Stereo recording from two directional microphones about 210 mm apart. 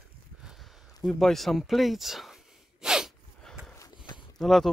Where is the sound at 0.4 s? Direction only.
Centre (ahead or behind).